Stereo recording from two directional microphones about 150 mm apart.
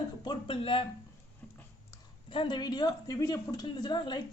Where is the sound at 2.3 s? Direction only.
30° left (ahead or behind).